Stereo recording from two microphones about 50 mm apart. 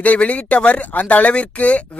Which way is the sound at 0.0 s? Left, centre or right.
Left.